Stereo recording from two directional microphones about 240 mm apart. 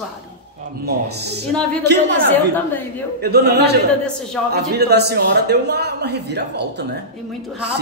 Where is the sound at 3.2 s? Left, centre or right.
Right.